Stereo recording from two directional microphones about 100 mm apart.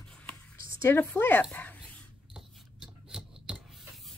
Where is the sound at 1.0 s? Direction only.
20° left (ahead or behind).